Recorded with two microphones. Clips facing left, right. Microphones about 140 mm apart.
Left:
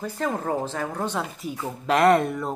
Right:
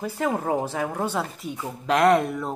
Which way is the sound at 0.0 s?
10° right (ahead or behind).